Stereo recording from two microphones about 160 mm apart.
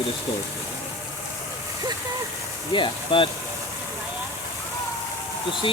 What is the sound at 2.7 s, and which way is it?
Speech, 30° left (ahead or behind).